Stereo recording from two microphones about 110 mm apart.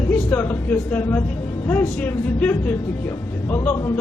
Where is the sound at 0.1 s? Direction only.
15° left (ahead or behind).